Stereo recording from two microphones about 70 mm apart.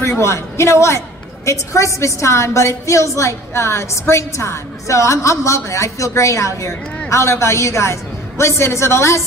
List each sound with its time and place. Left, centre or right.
0.2 s a woman's voice: left